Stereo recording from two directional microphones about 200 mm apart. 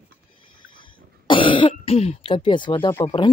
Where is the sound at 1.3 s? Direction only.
25° left (ahead or behind).